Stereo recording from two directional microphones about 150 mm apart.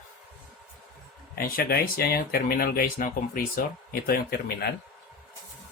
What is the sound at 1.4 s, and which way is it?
Speech, 80° left.